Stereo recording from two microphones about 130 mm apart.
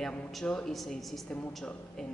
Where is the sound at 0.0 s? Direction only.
5° left (ahead or behind).